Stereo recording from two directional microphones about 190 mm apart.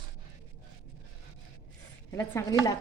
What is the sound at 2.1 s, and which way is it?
Speech, 15° left (ahead or behind).